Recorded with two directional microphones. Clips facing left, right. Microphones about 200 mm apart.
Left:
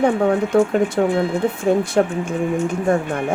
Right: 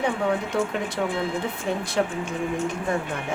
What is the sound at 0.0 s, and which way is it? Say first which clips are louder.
Speech: left 8 dB; 50° left (ahead or behind).